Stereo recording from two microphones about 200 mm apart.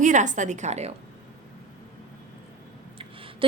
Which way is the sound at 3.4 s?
25° right (ahead or behind).